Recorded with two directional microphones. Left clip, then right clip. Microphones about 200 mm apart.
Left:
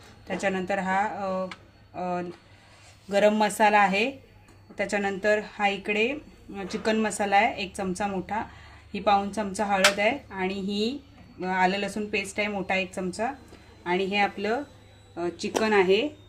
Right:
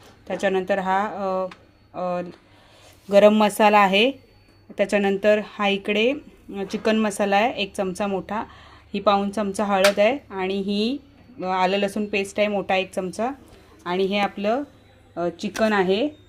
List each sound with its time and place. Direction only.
0.3 s speech: 35° right (ahead or behind)
15.4 s speech: 5° right (ahead or behind)